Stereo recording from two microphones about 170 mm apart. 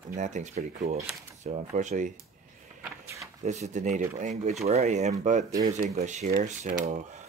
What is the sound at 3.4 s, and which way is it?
Speech, 45° right (ahead or behind).